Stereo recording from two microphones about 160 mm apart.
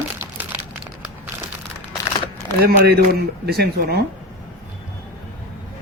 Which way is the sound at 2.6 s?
80° right.